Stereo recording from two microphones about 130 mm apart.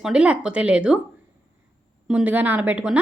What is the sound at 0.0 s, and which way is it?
Speech, 10° right (ahead or behind).